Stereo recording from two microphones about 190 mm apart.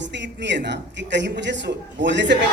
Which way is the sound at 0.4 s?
65° right (ahead or behind).